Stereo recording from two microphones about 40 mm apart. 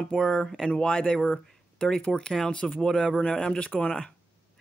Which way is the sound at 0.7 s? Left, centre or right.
Left.